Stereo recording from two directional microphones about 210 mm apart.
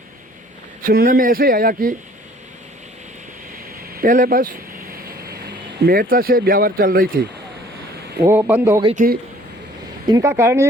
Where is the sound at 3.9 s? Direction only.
40° right (ahead or behind).